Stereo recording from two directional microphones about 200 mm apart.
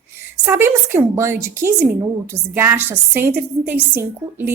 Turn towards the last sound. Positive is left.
turn(degrees=-10)  # may be behind; listen again after turning